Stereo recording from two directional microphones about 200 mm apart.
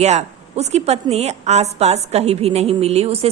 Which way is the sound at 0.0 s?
35° right (ahead or behind).